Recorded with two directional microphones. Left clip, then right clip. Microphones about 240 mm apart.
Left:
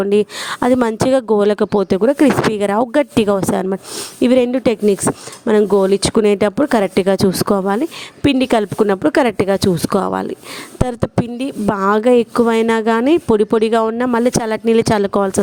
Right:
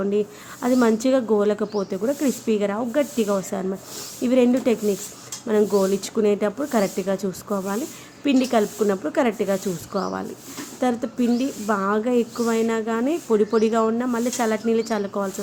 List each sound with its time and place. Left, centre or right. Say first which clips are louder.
0.0 s a woman's voice: left 8 dB; left